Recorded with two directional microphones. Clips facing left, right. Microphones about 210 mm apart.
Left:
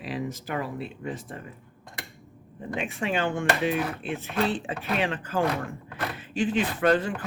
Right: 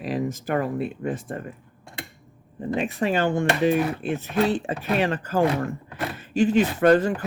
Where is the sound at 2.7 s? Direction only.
35° right (ahead or behind).